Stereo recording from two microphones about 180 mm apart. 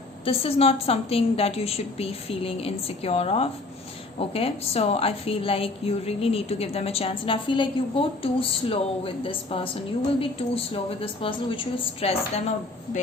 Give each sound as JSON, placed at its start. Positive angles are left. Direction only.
{"t": 0.3, "sound": "a woman's voice", "side_deg": 35}